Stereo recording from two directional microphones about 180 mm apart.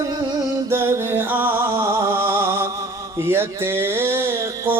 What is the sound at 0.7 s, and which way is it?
Music, 15° right (ahead or behind).